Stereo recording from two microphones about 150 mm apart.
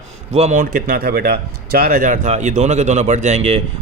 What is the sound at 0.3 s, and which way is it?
Speech, 50° right (ahead or behind).